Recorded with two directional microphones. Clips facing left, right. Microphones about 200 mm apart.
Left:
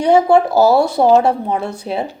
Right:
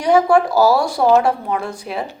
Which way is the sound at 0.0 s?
25° left (ahead or behind).